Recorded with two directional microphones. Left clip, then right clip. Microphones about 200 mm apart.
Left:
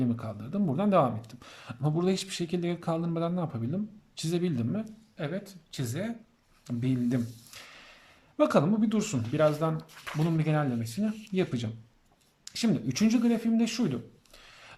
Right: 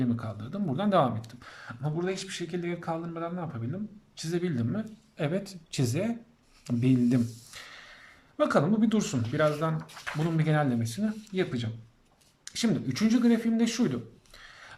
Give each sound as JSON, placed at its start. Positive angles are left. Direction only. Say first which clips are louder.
{"t": 0.0, "sound": "speech", "louder": "even", "side_deg": 10}
{"t": 9.3, "sound": "speech", "louder": "left 1 dB", "side_deg": 15}
{"t": 11.0, "sound": "speech", "louder": "left 2 dB", "side_deg": 15}